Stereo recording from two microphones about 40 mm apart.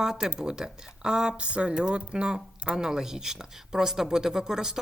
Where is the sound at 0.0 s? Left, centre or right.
Centre.